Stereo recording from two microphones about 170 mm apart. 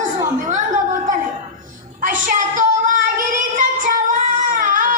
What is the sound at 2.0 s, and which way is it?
Child singing, 50° right (ahead or behind).